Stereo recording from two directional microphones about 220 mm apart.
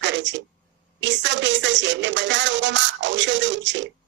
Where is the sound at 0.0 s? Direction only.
55° right (ahead or behind).